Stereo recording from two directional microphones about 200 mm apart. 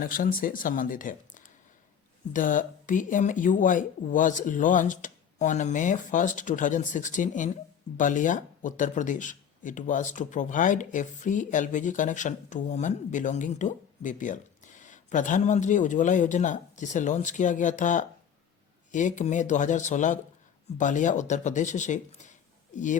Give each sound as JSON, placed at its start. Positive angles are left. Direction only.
{"t": 0.0, "sound": "speech", "side_deg": 45}